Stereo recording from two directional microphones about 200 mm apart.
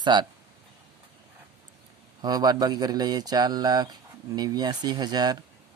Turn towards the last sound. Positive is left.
turn(degrees=-20)  # may be behind; listen again after turning